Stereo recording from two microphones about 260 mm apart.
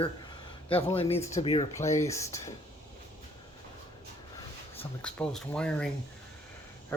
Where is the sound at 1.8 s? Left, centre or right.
Centre.